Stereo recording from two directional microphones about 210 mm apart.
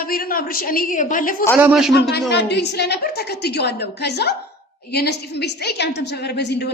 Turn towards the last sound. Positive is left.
turn(degrees=55)  # may be behind; listen again after turning